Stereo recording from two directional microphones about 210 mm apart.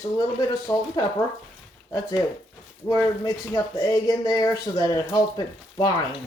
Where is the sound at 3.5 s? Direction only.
15° left (ahead or behind).